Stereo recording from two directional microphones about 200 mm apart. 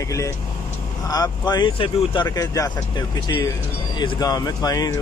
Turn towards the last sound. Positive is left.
turn(degrees=20)  # may be behind; listen again after turning